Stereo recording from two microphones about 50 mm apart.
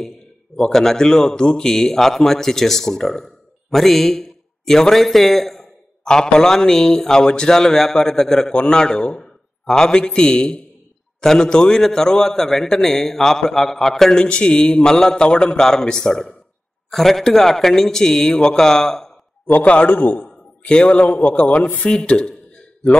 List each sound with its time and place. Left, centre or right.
0.6 s a man's voice: centre
14.2 s a man's voice: centre
19.4 s a man's voice: left
20.0 s a man's voice: left
20.6 s speech: centre
21.8 s speech: centre